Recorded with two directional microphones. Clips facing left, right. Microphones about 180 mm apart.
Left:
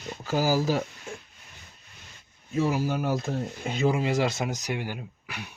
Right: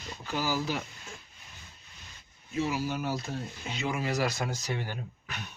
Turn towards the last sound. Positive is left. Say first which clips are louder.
# left 2 dB
turn(degrees=10)  # may be behind; listen again after turning